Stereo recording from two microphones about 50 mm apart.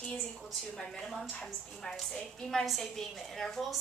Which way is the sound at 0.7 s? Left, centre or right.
Centre.